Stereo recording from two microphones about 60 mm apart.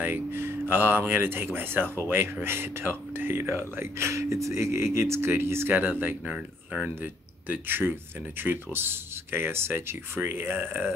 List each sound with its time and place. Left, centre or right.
0.0 s speech: right
5.8 s speech: right
6.2 s speech: centre
7.0 s speech: right